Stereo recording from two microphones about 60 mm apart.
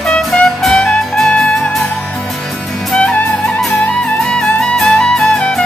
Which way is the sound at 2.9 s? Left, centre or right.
Centre.